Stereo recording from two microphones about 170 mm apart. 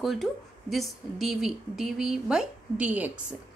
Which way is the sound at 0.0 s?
Centre (ahead or behind).